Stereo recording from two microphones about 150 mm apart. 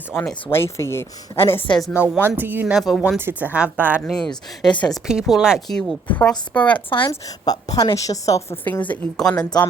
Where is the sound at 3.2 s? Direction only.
15° right (ahead or behind).